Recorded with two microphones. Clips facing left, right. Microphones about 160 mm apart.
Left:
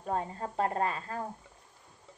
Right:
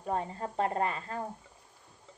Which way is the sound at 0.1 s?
20° right (ahead or behind).